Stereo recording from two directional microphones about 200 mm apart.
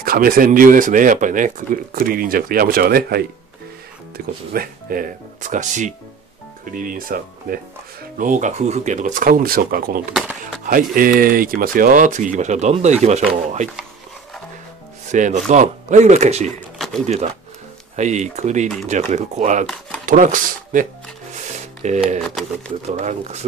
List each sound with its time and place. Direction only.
0.0 s speech: 45° right (ahead or behind)
4.5 s speech: 45° right (ahead or behind)
10.1 s speech: centre (ahead or behind)
10.6 s speech: 45° right (ahead or behind)
15.0 s speech: 35° right (ahead or behind)
16.7 s a sound: centre (ahead or behind)
17.0 s speech: 35° right (ahead or behind)
21.8 s speech: 35° right (ahead or behind)